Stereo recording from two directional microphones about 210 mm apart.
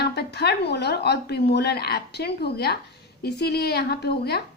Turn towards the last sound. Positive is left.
turn(degrees=50)  # may be behind; listen again after turning